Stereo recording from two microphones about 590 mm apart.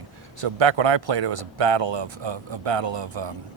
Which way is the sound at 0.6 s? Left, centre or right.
Right.